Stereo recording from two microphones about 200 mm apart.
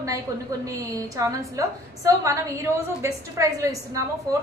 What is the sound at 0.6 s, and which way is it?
A woman's voice, 15° right (ahead or behind).